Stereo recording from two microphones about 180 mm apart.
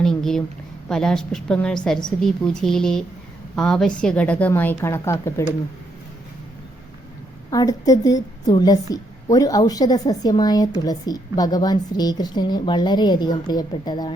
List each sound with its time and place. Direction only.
0.0 s a sound: centre (ahead or behind)
0.9 s a woman's voice: 5° left (ahead or behind)
7.5 s a woman's voice: 20° left (ahead or behind)